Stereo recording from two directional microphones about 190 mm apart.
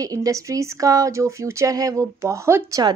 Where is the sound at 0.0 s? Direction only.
20° right (ahead or behind).